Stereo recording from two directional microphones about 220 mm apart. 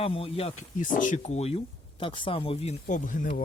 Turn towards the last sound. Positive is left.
turn(degrees=35)  # may be behind; listen again after turning